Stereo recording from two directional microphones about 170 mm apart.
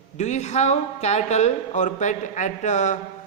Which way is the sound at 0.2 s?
45° left (ahead or behind).